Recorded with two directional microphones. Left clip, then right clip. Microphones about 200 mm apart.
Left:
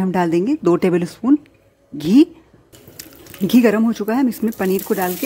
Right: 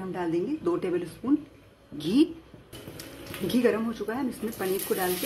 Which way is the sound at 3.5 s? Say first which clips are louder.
Left 10 dB; 55° left (ahead or behind).